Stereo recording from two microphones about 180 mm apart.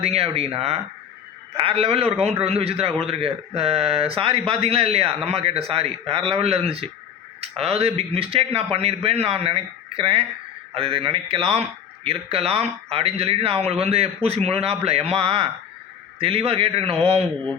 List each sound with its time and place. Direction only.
0.0 s a man's voice: 35° right (ahead or behind)